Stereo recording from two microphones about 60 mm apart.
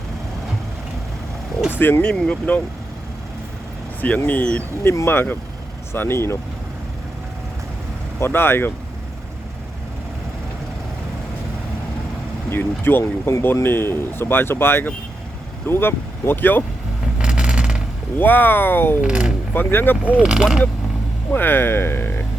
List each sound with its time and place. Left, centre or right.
1.8 s speech: left
2.0 s speech: centre
4.0 s speech: left
5.0 s speech: left
8.2 s speech: left
12.5 s speech: left
17.2 s vehicle: centre
18.2 s speech: left
19.0 s speech: centre
19.5 s speech: left
20.1 s speech: centre
21.3 s speech: left